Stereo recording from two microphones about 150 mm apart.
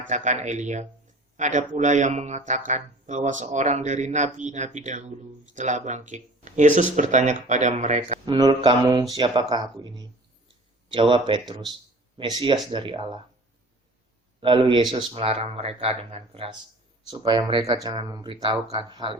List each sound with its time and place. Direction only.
0.1 s speech: 50° right (ahead or behind)
8.2 s speech: 35° right (ahead or behind)
8.8 s speech: 25° right (ahead or behind)
14.4 s speech: 35° right (ahead or behind)